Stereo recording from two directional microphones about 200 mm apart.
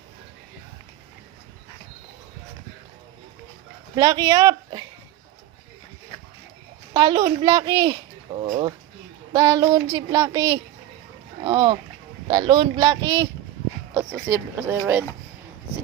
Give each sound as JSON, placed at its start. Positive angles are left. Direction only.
{"t": 3.9, "sound": "speech", "side_deg": -20}
{"t": 6.9, "sound": "a child's voice", "side_deg": -20}
{"t": 9.3, "sound": "a sound", "side_deg": -20}
{"t": 13.9, "sound": "speech", "side_deg": -10}